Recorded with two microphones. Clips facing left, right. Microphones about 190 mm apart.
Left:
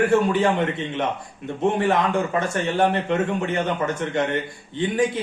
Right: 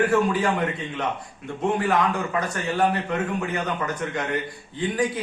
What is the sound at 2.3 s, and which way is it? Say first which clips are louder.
A man's voice: left 3 dB; 25° left (ahead or behind).